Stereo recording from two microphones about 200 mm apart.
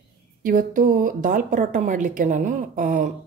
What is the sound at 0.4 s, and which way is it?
Speech, 45° right (ahead or behind).